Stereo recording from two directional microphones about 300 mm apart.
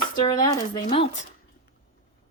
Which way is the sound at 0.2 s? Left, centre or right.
Centre.